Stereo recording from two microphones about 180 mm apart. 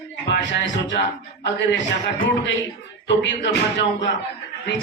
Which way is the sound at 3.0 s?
75° left (ahead or behind).